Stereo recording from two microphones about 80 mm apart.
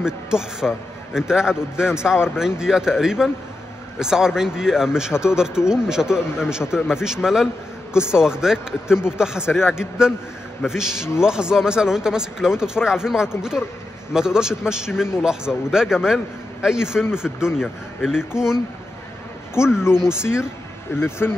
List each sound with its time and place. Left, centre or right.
0.0 s a man's voice: centre
9.5 s a man's voice: left
9.8 s a man's voice: centre
19.5 s speech: left